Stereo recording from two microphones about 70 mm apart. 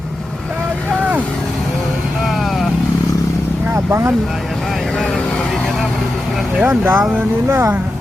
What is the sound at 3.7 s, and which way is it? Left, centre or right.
Vehicle, right.